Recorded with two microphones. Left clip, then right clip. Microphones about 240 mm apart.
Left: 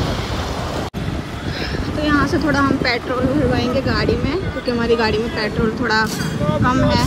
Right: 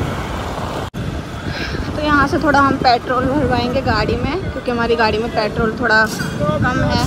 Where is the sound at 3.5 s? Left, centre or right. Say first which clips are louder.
Right 2 dB; centre.